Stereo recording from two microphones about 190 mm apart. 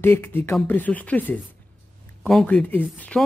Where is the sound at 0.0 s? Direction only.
10° left (ahead or behind).